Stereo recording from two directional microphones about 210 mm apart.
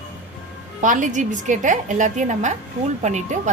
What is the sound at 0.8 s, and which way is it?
A woman's voice, 35° right (ahead or behind).